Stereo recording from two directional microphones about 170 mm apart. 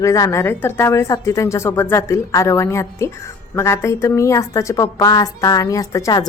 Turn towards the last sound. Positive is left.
turn(degrees=20)  # may be behind; listen again after turning